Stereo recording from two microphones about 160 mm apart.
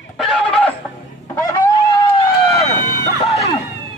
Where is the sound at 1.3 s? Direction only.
25° left (ahead or behind).